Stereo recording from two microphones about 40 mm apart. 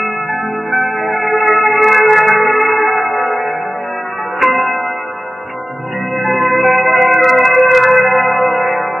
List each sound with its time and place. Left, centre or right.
0.7 s music: right
1.4 s music: centre
3.0 s music: right
4.4 s music: centre
6.2 s music: centre